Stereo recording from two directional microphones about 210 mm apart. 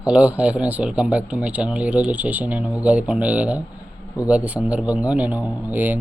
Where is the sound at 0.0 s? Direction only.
5° right (ahead or behind).